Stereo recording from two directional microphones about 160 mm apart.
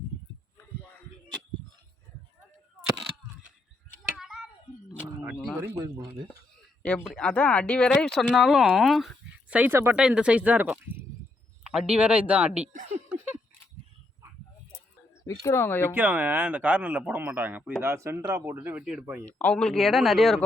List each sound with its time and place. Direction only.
0.5 s a sound: 15° left (ahead or behind)
4.2 s a sound: 5° right (ahead or behind)
6.8 s a man's voice: 5° left (ahead or behind)
15.3 s speech: 15° left (ahead or behind)
16.0 s a man's voice: 10° right (ahead or behind)
19.4 s speech: 5° left (ahead or behind)